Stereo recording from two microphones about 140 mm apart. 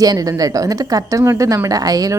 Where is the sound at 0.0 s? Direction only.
25° right (ahead or behind).